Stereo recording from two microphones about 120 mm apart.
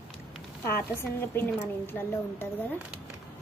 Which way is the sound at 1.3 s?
20° left (ahead or behind).